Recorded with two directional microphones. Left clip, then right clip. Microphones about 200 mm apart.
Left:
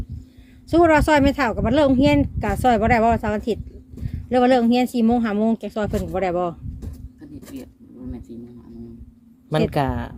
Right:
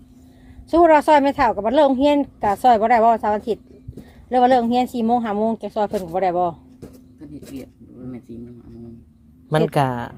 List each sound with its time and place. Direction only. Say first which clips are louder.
0.7 s speech: right 3 dB; 35° left (ahead or behind)
8.3 s a sound: right 1 dB; 10° left (ahead or behind)
9.5 s speech: right 3 dB; centre (ahead or behind)